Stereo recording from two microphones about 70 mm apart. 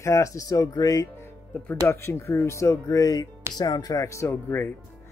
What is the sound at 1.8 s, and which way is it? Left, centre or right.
Speech, left.